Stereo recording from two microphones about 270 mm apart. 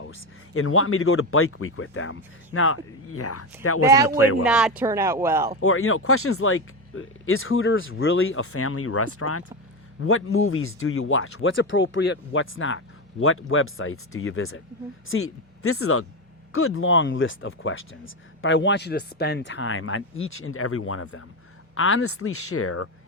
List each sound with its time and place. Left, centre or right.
0.0 s speech: left
3.8 s speech: centre
4.2 s speech: left
4.4 s speech: centre
5.5 s speech: left